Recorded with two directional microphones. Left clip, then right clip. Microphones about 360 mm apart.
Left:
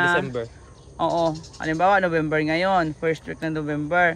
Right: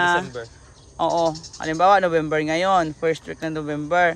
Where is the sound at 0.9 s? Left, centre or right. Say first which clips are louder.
Right 2 dB; centre.